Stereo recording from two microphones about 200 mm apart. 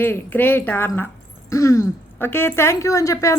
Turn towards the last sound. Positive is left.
turn(degrees=15)  # may be behind; listen again after turning